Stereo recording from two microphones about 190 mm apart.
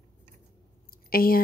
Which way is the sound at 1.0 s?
50° left (ahead or behind).